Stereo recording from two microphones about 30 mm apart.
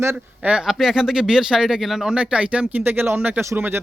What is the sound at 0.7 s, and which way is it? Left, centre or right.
Speech, centre.